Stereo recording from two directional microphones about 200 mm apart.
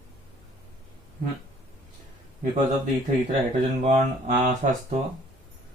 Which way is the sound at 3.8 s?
35° right (ahead or behind).